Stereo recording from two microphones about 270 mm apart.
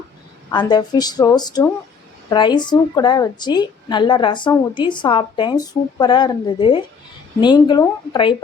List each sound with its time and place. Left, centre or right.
0.5 s a woman's voice: centre